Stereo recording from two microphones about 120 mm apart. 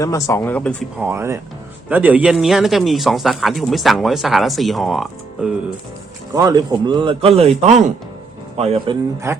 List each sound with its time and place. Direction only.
0.0 s speech: 25° left (ahead or behind)
0.9 s speech: 20° right (ahead or behind); by 5.5 s 5° right (ahead or behind)
6.3 s speech: 30° right (ahead or behind); by 9.0 s 55° right (ahead or behind)
9.3 s speech: 25° right (ahead or behind)